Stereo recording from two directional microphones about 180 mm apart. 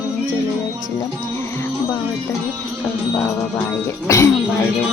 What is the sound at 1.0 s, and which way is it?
Music, 15° left (ahead or behind).